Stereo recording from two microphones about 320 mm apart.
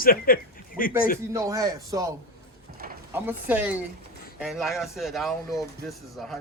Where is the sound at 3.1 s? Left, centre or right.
Centre.